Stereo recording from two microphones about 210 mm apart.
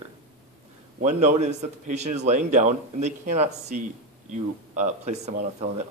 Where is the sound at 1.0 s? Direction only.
35° right (ahead or behind).